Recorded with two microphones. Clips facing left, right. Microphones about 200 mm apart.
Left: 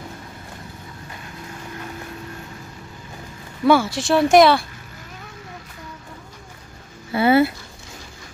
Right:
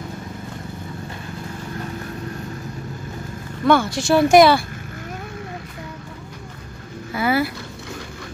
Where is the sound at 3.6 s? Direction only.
5° left (ahead or behind).